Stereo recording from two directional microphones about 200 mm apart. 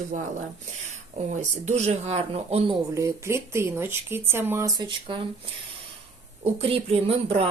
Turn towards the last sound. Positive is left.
turn(degrees=-30)  # may be behind; listen again after turning